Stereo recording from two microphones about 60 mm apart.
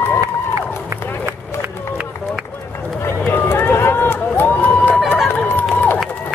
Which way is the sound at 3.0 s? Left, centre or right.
Left.